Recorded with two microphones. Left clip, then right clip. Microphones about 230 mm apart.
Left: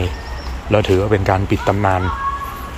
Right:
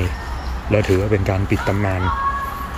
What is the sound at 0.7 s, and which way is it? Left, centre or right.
Speech, left.